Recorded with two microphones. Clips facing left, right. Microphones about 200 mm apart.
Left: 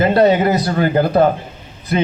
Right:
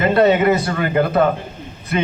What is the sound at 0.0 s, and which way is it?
A man's voice, 35° left (ahead or behind).